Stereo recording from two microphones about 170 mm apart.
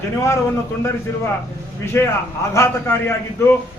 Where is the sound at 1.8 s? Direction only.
15° left (ahead or behind).